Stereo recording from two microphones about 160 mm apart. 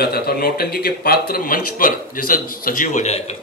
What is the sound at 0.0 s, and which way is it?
A man's voice, 75° left (ahead or behind).